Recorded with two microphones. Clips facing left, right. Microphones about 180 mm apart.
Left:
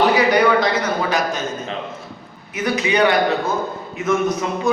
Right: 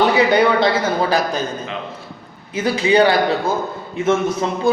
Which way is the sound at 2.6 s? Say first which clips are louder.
Right 3 dB; 30° right (ahead or behind).